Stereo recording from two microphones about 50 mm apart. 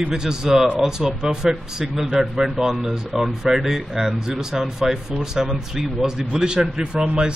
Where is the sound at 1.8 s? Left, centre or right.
Centre.